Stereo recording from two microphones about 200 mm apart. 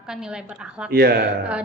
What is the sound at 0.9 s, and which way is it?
Speech, 50° right (ahead or behind).